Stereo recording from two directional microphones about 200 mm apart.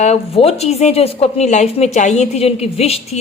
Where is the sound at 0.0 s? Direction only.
30° left (ahead or behind).